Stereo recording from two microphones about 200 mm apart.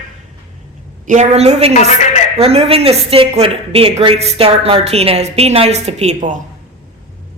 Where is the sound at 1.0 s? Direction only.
40° right (ahead or behind).